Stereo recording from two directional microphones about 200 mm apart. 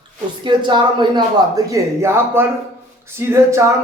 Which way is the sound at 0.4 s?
25° right (ahead or behind).